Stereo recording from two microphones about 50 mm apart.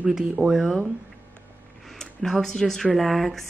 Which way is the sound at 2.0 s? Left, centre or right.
Centre.